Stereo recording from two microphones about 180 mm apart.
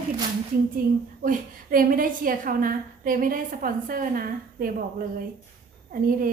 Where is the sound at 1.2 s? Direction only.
50° right (ahead or behind).